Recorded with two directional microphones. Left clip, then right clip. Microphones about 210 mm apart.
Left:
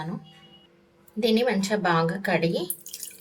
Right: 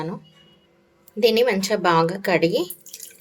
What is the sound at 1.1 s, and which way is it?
Speech, 45° right (ahead or behind).